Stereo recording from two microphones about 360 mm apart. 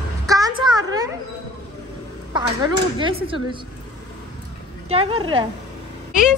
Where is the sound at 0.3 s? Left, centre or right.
Centre.